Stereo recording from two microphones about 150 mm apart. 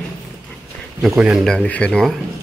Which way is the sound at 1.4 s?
5° left (ahead or behind).